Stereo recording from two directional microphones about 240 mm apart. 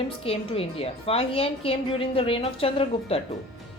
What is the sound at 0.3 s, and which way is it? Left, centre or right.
Speech, left.